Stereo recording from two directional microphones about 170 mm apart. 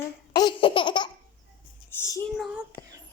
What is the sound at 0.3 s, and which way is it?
Laughter, 30° left (ahead or behind).